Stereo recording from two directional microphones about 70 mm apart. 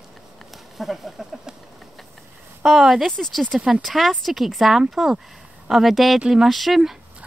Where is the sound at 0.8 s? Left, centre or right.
Centre.